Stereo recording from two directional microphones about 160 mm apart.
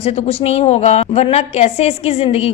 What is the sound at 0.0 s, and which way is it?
A woman's voice, 40° left (ahead or behind).